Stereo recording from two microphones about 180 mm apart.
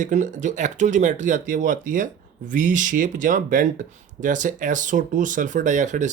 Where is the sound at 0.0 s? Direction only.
45° right (ahead or behind).